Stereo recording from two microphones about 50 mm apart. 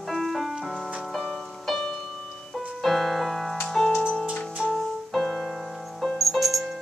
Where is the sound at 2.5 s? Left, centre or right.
Centre.